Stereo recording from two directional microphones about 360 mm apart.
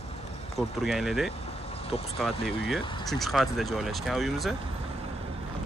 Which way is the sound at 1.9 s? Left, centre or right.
Centre.